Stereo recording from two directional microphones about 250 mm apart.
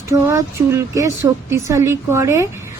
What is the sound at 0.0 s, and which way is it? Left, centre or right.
Speech, centre.